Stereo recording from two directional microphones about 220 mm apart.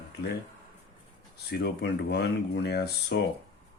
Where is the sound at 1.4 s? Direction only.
50° left (ahead or behind).